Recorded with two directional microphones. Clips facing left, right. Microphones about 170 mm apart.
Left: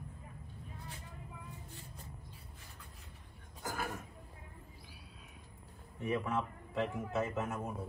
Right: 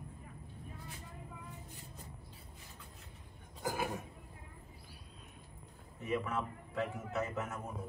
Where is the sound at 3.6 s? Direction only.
15° right (ahead or behind).